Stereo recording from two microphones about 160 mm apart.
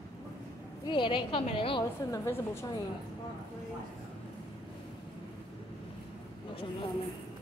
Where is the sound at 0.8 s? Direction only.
30° left (ahead or behind).